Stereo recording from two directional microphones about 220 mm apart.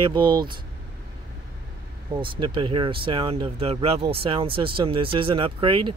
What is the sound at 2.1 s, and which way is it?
Speech, 20° right (ahead or behind).